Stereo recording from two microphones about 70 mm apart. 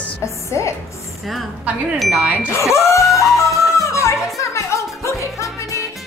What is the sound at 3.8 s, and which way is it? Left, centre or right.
Music, left.